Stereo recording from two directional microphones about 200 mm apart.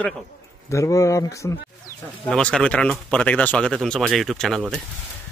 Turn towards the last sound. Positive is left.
turn(degrees=0)  # may be behind; listen again after turning